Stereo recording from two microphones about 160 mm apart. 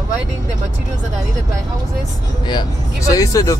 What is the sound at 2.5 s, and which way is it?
Speech, 25° left (ahead or behind).